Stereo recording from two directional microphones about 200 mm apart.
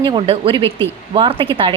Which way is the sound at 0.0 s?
25° right (ahead or behind).